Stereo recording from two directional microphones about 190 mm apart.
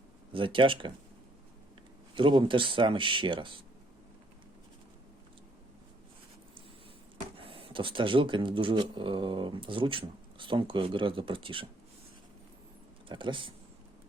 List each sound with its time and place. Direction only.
0.3 s speech: 25° right (ahead or behind)
2.1 s speech: 25° right (ahead or behind)
7.3 s speech: 30° right (ahead or behind)
13.1 s speech: 25° right (ahead or behind)